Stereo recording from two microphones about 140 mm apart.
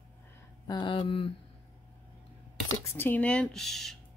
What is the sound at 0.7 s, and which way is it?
Speech, 35° left (ahead or behind).